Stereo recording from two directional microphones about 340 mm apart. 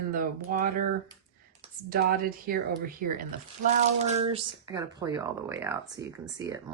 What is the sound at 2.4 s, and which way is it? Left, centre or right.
Speech, right.